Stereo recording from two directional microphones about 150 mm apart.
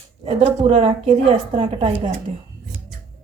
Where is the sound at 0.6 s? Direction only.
45° right (ahead or behind).